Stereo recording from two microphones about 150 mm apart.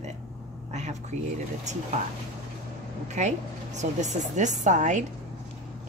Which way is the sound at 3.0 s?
50° right (ahead or behind).